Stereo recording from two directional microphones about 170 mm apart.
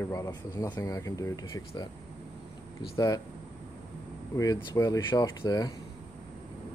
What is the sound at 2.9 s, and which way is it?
Speech, 20° left (ahead or behind).